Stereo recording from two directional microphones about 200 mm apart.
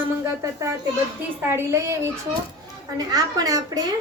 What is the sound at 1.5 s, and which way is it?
Speech, 15° right (ahead or behind).